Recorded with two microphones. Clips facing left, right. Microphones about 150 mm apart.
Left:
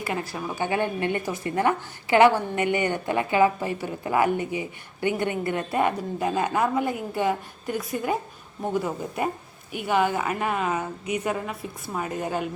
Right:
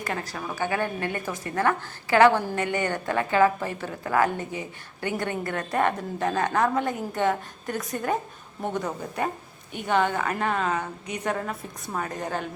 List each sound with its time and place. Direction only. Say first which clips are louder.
0.0 s a woman's voice: left 2 dB; 10° left (ahead or behind)